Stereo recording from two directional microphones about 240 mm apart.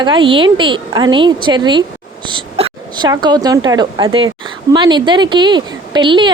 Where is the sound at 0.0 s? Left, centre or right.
Centre.